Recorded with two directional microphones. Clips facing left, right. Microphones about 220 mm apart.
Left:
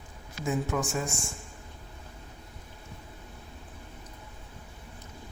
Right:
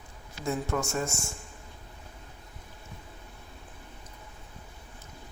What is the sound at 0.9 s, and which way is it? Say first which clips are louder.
Speech: right 1 dB; 5° left (ahead or behind).